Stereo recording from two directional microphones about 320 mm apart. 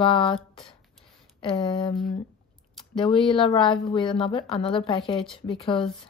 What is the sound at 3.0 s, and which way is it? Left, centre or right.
Speech, centre.